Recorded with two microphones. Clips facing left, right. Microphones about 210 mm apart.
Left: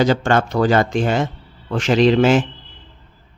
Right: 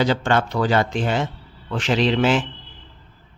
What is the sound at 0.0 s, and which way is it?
Speech, 45° left (ahead or behind).